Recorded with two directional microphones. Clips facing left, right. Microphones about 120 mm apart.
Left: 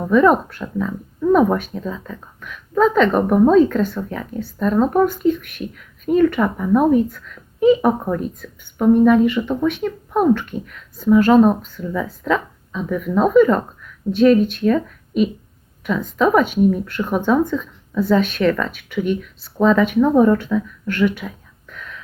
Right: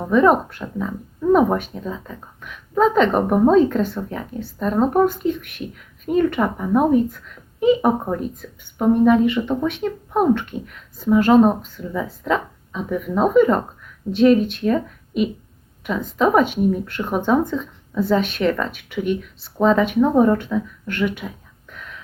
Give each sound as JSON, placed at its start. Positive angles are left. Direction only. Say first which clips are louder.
{"t": 0.1, "sound": "speech", "louder": "left 1 dB", "side_deg": -20}
{"t": 11.0, "sound": "speech", "louder": "left 2 dB", "side_deg": -20}